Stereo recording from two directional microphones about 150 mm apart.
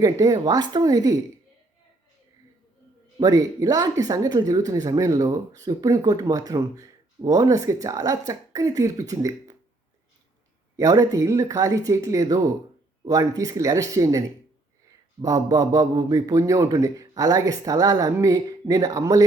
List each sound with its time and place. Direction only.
0.0 s a man's voice: 25° right (ahead or behind)
3.2 s a man's voice: 25° right (ahead or behind)
10.8 s a man's voice: 25° right (ahead or behind)